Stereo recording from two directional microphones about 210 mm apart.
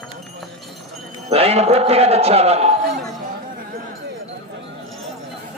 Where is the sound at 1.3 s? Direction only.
30° right (ahead or behind).